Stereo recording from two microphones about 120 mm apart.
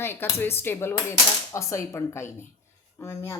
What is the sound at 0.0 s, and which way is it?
Speech, 20° left (ahead or behind).